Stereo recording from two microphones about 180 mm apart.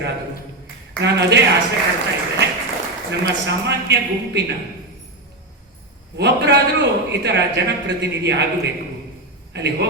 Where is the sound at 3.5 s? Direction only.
75° right (ahead or behind).